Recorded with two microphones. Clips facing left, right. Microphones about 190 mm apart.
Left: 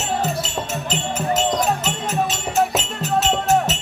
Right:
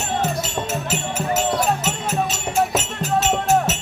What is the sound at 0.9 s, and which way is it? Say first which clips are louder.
Music: left 1 dB; 10° right (ahead or behind).